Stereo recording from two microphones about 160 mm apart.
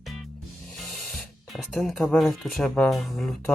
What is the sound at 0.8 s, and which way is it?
Speech, centre (ahead or behind).